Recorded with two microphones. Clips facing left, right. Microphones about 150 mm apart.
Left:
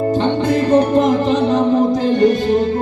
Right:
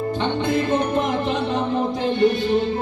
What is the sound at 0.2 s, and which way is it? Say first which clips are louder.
Music: left 6 dB; 40° left (ahead or behind).